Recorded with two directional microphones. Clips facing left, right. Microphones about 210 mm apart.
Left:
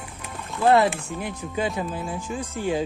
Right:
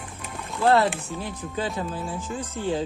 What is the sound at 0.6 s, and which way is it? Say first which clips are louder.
Speech: left 2 dB; 15° left (ahead or behind).